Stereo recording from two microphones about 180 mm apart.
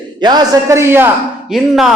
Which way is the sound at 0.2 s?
25° right (ahead or behind).